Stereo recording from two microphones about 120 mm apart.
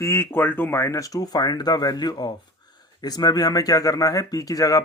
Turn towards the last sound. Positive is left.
turn(degrees=30)  # may be behind; listen again after turning